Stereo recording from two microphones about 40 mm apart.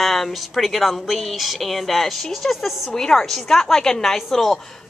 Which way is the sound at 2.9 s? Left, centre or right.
Centre.